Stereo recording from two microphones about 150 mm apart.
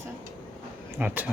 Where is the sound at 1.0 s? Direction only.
10° right (ahead or behind).